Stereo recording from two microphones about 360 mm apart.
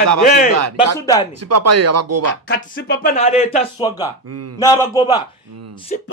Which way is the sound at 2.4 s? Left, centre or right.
Left.